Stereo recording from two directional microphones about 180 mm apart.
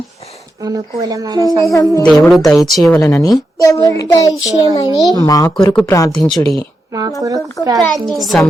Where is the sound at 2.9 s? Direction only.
15° left (ahead or behind).